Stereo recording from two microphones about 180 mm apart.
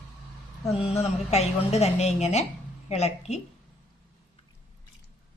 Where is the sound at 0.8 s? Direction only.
35° left (ahead or behind).